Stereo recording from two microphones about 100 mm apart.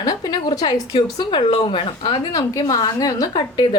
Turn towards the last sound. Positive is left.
turn(degrees=40)  # may be behind; listen again after turning